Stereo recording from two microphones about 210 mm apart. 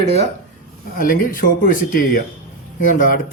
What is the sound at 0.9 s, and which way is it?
Speech, 40° left (ahead or behind).